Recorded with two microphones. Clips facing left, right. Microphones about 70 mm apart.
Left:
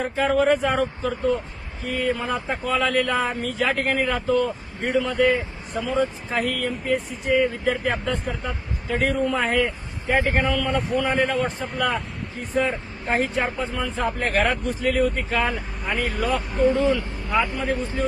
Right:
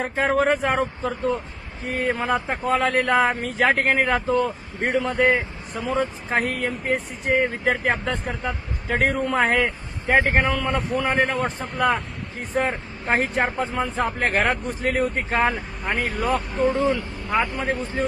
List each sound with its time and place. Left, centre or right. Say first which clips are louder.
0.0 s speech: even; right
5.8 s speech: even; right
10.1 s speech: right 2 dB; right
11.3 s speech: even; right
15.5 s speech: right 1 dB; centre
16.6 s speech: left 2 dB; right